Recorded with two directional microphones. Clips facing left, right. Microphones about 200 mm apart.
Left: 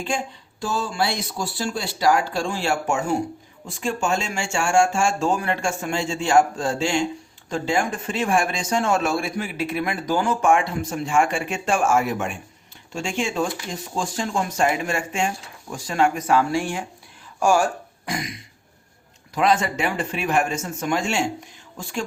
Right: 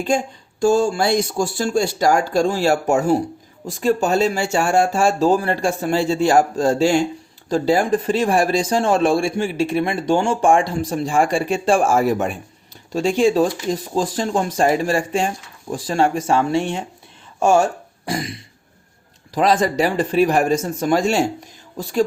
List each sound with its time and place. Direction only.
0.6 s speech: 45° right (ahead or behind)